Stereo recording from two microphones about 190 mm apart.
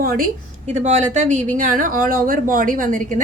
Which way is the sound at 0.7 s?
40° right (ahead or behind).